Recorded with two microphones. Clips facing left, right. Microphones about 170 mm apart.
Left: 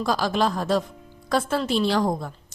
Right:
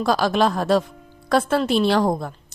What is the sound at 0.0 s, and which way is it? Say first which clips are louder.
A woman's voice: right 4 dB; 65° right (ahead or behind).